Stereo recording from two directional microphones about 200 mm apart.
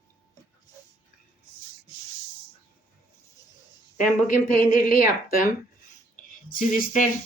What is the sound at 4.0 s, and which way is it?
Speech, 40° left (ahead or behind).